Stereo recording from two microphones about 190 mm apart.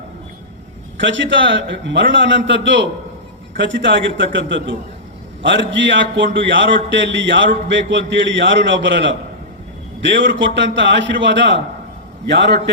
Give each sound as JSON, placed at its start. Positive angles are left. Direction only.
{"t": 1.0, "sound": "a man's voice", "side_deg": -75}
{"t": 10.2, "sound": "a man's voice", "side_deg": -70}